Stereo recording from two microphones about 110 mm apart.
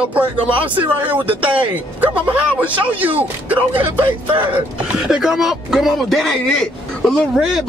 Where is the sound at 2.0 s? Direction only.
15° right (ahead or behind).